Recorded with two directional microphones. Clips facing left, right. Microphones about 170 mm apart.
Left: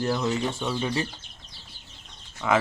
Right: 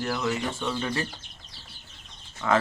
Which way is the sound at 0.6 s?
15° left (ahead or behind).